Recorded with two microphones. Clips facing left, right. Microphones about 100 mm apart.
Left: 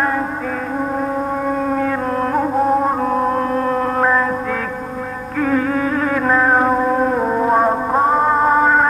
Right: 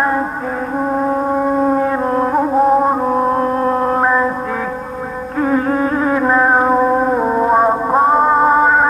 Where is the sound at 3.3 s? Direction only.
25° right (ahead or behind).